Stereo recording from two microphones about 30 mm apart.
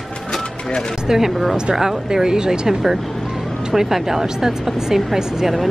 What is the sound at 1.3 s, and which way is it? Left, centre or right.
Speech, centre.